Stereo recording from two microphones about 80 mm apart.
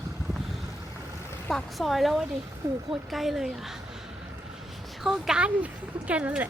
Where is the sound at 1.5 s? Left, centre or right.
Centre.